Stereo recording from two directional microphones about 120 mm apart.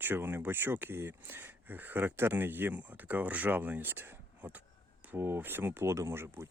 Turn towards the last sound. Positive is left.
turn(degrees=-20)  # may be behind; listen again after turning